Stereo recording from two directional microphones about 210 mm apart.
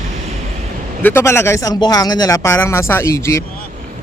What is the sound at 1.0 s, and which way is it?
Speech, 10° left (ahead or behind).